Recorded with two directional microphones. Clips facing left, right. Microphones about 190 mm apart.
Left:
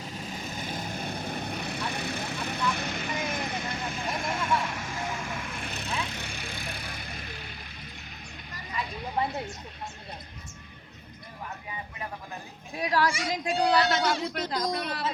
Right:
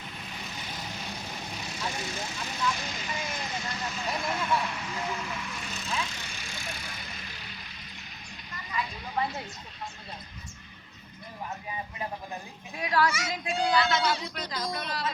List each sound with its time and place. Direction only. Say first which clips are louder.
0.0 s vehicle: left 5 dB; 40° left (ahead or behind)
12.7 s speech: left 1 dB; 35° left (ahead or behind); by 15.0 s 50° left (ahead or behind)